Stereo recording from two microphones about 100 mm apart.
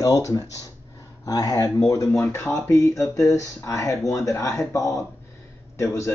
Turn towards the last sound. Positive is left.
turn(degrees=30)  # may be behind; listen again after turning